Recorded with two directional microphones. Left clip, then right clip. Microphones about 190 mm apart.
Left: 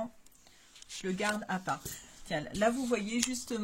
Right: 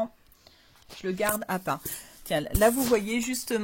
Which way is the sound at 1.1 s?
55° right (ahead or behind).